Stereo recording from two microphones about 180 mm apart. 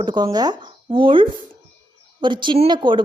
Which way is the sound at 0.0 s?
25° right (ahead or behind).